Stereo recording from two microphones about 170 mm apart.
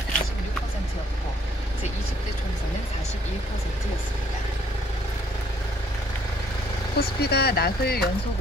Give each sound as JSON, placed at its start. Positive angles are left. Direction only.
{"t": 7.0, "sound": "speech", "side_deg": 70}